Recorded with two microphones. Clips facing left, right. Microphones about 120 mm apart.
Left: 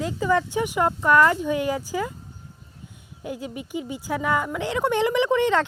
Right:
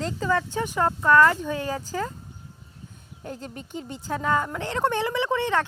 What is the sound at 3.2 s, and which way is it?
Speech, 10° left (ahead or behind).